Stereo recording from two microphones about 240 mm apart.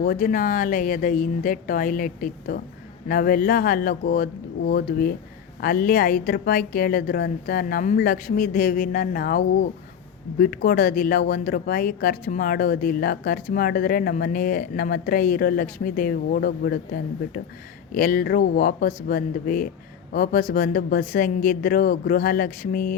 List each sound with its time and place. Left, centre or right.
0.0 s speech: left